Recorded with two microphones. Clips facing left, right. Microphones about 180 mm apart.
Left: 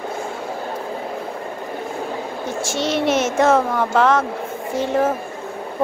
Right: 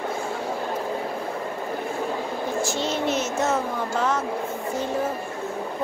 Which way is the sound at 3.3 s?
90° left.